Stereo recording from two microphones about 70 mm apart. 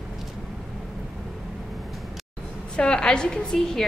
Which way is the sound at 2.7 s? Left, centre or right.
Centre.